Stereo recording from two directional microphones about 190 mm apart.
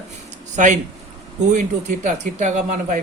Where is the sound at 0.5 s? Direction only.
40° right (ahead or behind).